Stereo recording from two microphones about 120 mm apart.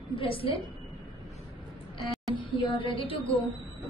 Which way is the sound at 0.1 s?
50° left (ahead or behind).